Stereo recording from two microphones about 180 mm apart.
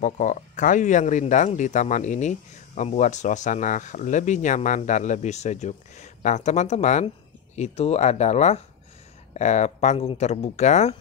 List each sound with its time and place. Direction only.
0.0 s speech: 40° left (ahead or behind)